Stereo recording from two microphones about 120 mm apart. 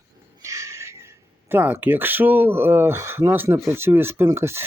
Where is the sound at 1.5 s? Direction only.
15° right (ahead or behind).